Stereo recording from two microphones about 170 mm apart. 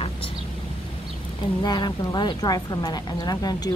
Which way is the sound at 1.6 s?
25° left (ahead or behind).